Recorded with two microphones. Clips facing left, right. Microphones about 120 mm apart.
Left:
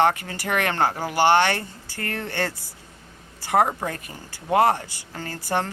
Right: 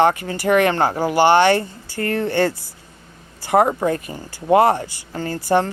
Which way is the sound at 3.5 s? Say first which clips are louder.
Right 5 dB; 20° right (ahead or behind).